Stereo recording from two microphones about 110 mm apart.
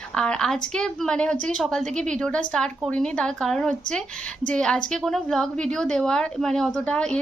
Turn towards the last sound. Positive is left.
turn(degrees=10)  # may be behind; listen again after turning